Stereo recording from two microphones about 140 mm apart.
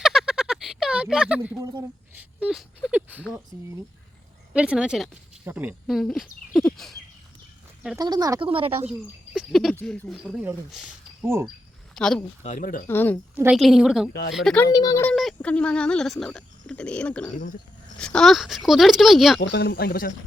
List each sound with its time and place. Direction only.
0.0 s a sound: 5° right (ahead or behind)
1.5 s speech: 25° right (ahead or behind)
2.1 s speech: 5° right (ahead or behind)
5.9 s speech: centre (ahead or behind)
7.9 s speech: 30° right (ahead or behind)
8.4 s speech: 40° right (ahead or behind)
8.9 s speech: 5° right (ahead or behind)
12.4 s speech: 65° left (ahead or behind); by 12.8 s 80° left
12.9 s speech: 15° left (ahead or behind)
13.3 s a woman's voice: 10° right (ahead or behind)
13.6 s speech: centre (ahead or behind)
14.7 s speech: 25° left (ahead or behind)
15.1 s speech: centre (ahead or behind)
19.7 s speech: 90° left